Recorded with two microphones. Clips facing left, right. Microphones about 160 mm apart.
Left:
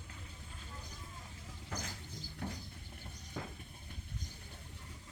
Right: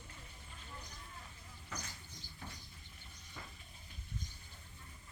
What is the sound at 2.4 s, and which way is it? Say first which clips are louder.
Rodents: left 9 dB; 70° left (ahead or behind).